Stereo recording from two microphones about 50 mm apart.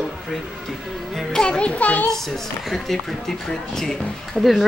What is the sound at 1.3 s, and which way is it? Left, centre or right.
Speech, centre.